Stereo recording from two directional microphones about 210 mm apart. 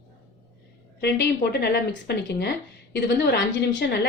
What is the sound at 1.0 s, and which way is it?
A woman's voice, 55° left (ahead or behind).